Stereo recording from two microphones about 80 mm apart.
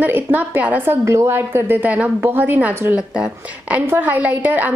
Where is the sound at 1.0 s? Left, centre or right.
Right.